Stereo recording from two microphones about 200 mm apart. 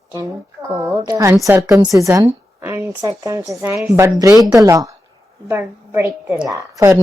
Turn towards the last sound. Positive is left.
turn(degrees=-15)  # may be behind; listen again after turning